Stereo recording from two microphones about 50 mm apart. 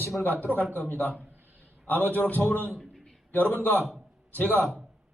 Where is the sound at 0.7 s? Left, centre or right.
Left.